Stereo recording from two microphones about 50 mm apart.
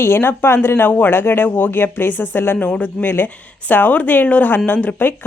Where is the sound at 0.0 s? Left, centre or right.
Left.